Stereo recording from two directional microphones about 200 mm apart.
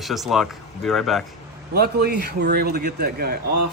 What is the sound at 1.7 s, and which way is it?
A man's voice, 50° right (ahead or behind).